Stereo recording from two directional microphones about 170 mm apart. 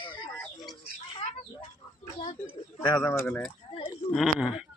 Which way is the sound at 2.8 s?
25° left (ahead or behind).